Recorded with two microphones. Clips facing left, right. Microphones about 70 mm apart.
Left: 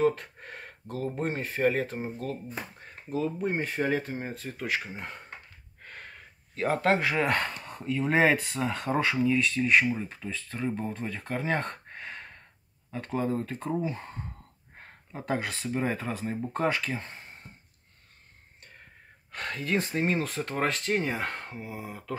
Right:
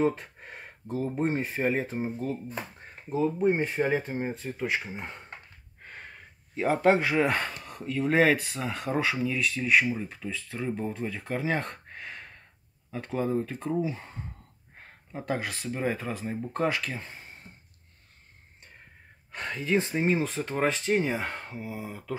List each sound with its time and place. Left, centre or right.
0.0 s speech: centre
14.8 s a sound: centre
15.9 s speech: centre
19.3 s speech: centre